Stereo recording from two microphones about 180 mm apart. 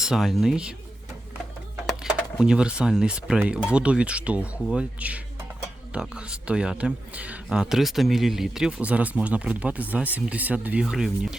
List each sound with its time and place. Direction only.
0.0 s speech: centre (ahead or behind)
1.9 s speech: 5° right (ahead or behind)
6.5 s speech: 5° right (ahead or behind)